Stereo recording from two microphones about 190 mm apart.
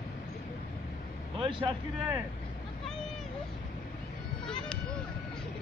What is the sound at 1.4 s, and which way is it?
Speech, 25° right (ahead or behind).